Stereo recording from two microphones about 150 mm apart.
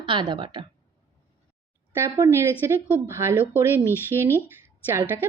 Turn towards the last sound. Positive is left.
turn(degrees=-15)  # may be behind; listen again after turning